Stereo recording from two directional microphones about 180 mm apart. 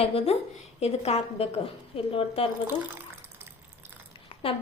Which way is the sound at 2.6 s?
10° right (ahead or behind).